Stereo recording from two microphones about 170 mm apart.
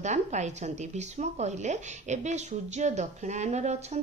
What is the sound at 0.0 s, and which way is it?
Speech, 45° right (ahead or behind).